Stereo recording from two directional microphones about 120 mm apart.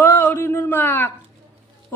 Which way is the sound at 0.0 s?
20° left (ahead or behind).